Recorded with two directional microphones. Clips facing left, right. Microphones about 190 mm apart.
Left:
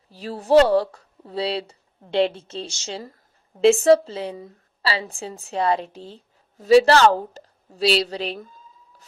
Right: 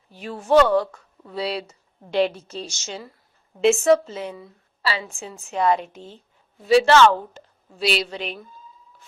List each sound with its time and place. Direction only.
0.1 s a woman's voice: 35° left (ahead or behind)